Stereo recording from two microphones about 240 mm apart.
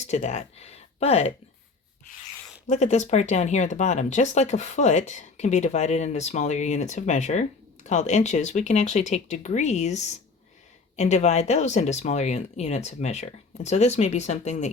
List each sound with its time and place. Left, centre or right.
0.1 s speech: left
2.6 s speech: left